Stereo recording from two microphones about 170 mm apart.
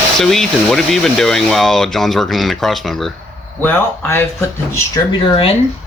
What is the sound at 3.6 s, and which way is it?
Speech, 10° left (ahead or behind).